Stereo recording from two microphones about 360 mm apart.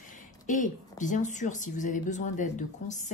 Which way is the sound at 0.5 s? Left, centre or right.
Left.